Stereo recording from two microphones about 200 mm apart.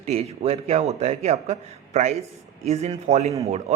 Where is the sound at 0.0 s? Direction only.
30° right (ahead or behind).